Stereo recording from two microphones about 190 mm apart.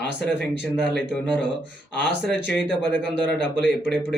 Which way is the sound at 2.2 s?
5° left (ahead or behind).